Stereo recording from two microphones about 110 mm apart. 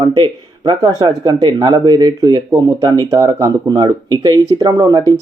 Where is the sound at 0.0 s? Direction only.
45° right (ahead or behind).